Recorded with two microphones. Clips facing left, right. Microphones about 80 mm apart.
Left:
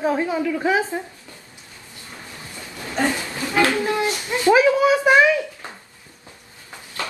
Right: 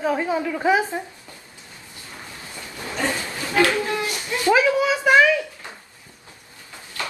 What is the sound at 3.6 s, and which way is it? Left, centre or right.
Speech, left.